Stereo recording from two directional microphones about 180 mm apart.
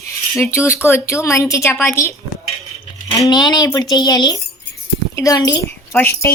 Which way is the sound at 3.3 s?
20° left (ahead or behind).